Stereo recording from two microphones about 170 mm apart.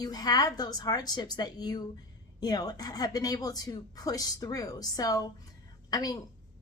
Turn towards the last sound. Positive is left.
turn(degrees=20)  # may be behind; listen again after turning